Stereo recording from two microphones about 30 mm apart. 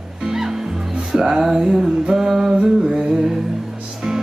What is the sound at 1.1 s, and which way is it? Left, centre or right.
Music, centre.